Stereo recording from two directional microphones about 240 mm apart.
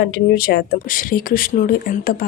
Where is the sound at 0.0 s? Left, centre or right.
Left.